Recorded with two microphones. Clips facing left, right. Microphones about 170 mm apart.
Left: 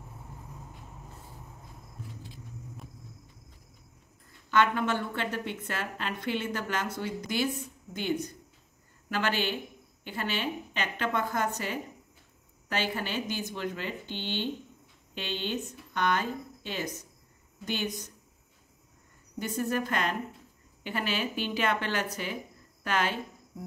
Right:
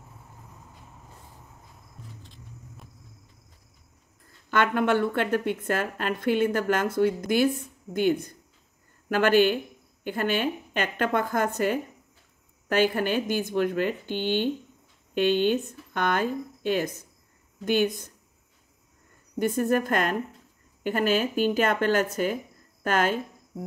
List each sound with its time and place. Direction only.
2.2 s vehicle: 5° left (ahead or behind)
4.5 s a woman's voice: 55° right (ahead or behind)
19.3 s a woman's voice: 50° right (ahead or behind)